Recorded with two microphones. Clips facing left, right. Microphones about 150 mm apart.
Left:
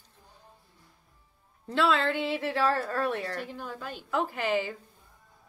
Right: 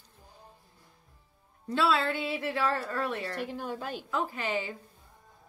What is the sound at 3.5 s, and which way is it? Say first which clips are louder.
Speech: right 3 dB; 40° right (ahead or behind).